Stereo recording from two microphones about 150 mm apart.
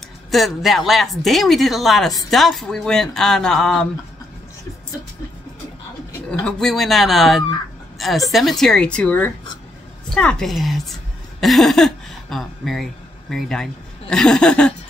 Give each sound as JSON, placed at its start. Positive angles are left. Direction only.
{"t": 0.3, "sound": "speech", "side_deg": 0}
{"t": 6.3, "sound": "speech", "side_deg": 5}